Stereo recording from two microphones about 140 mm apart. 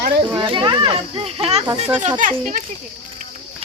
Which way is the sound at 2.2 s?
65° right (ahead or behind).